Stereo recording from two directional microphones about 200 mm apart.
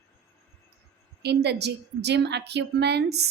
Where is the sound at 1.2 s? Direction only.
55° right (ahead or behind).